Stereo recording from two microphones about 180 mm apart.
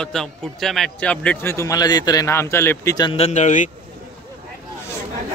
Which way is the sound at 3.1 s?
40° left (ahead or behind).